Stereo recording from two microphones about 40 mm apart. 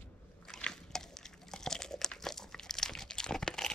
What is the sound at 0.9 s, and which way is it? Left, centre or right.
Crunch, centre.